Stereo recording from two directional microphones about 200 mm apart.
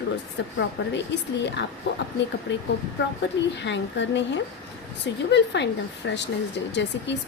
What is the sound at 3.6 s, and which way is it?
A woman's voice, 65° left (ahead or behind).